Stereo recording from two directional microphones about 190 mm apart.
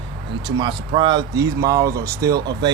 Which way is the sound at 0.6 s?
25° right (ahead or behind).